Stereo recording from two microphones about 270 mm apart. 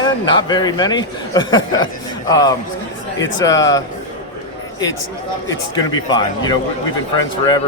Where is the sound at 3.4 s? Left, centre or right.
Centre.